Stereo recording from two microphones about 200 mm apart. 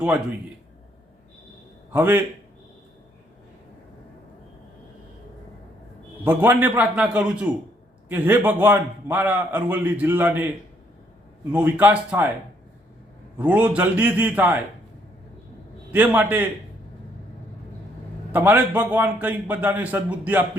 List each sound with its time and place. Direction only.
1.9 s a man's voice: 10° right (ahead or behind)
6.2 s a man's voice: 10° right (ahead or behind)
11.5 s a man's voice: 10° right (ahead or behind)
13.4 s a man's voice: 5° right (ahead or behind)
15.9 s a man's voice: 5° right (ahead or behind)
18.3 s a man's voice: 10° right (ahead or behind)